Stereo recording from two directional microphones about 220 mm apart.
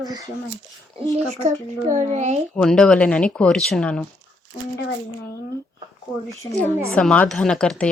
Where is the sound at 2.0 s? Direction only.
30° right (ahead or behind).